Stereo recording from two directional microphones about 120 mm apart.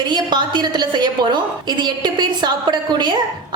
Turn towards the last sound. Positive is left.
turn(degrees=-40)  # may be behind; listen again after turning